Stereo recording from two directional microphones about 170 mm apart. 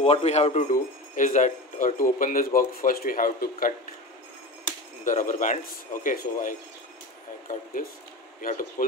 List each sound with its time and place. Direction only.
0.0 s a man's voice: 40° left (ahead or behind); by 3.7 s 55° left (ahead or behind)
5.0 s a man's voice: 50° left (ahead or behind)